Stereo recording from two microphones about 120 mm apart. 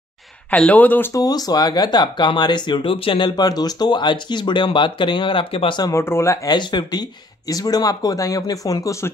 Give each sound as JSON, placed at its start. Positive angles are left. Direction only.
{"t": 0.5, "sound": "speech", "side_deg": 10}
{"t": 1.1, "sound": "speech", "side_deg": 30}
{"t": 5.8, "sound": "speech", "side_deg": 25}